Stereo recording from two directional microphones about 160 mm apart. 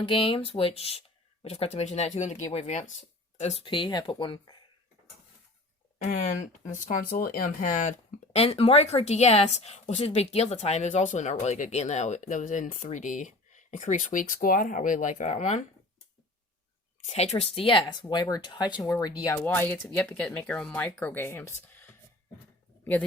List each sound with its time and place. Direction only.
0.0 s speech: 35° left (ahead or behind)
6.1 s speech: 55° left (ahead or behind)
17.1 s speech: 45° left (ahead or behind); by 23.0 s 10° left (ahead or behind)